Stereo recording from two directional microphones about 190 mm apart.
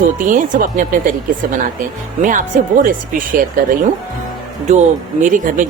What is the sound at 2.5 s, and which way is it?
Speech, 45° right (ahead or behind).